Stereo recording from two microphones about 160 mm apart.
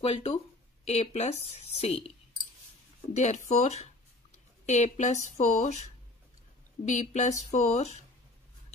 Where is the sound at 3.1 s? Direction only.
45° left (ahead or behind).